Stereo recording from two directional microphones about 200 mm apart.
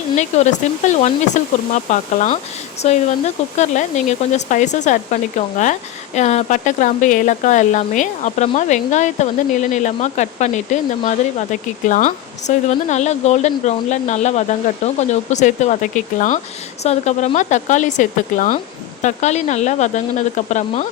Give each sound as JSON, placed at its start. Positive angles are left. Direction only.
{"t": 0.2, "sound": "a woman's voice", "side_deg": 35}
{"t": 6.1, "sound": "a woman's voice", "side_deg": 35}